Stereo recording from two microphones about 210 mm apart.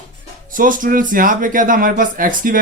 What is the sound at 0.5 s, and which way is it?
Speech, 40° right (ahead or behind).